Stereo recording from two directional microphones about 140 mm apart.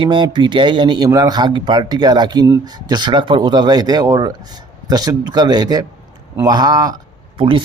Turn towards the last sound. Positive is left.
turn(degrees=-35)  # may be behind; listen again after turning